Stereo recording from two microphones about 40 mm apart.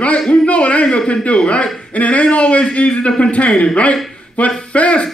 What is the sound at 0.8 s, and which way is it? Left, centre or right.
A man's voice, left.